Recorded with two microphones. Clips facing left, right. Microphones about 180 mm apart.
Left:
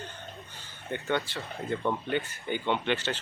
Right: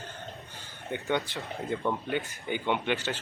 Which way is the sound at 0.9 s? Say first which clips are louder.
Even; 15° right (ahead or behind).